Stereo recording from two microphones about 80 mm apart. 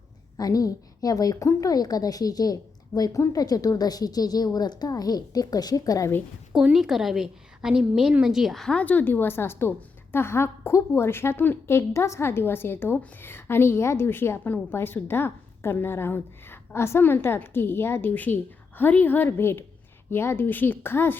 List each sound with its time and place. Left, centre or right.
0.3 s a woman's voice: left
6.5 s a woman's voice: centre
8.7 s a woman's voice: centre